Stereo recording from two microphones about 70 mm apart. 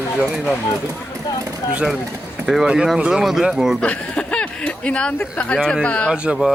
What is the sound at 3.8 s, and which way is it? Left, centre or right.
Speech, centre.